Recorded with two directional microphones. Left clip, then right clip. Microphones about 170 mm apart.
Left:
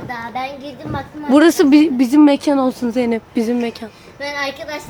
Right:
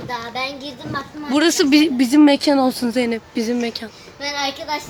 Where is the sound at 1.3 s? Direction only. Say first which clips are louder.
Left 5 dB; 30° left (ahead or behind).